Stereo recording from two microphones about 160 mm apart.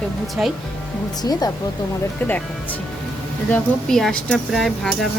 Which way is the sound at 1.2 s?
25° left (ahead or behind).